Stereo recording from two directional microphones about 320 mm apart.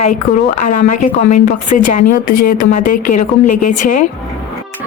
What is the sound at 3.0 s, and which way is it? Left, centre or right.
A woman's voice, left.